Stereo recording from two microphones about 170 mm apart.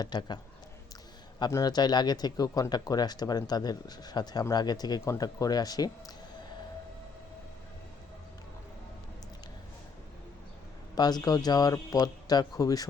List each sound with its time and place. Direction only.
0.0 s speech: 25° left (ahead or behind)
1.4 s speech: 20° left (ahead or behind)
10.9 s speech: 25° left (ahead or behind)